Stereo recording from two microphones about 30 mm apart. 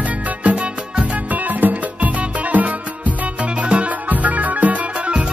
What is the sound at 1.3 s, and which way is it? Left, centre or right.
Music, right.